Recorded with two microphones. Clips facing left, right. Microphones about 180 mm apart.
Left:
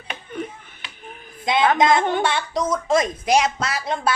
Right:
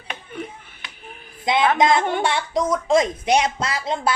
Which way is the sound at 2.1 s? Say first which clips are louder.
Even; 20° right (ahead or behind).